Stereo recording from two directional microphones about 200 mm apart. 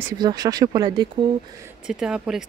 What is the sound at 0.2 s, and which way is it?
Speech, 20° right (ahead or behind).